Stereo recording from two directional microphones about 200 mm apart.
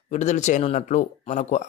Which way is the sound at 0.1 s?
35° left (ahead or behind).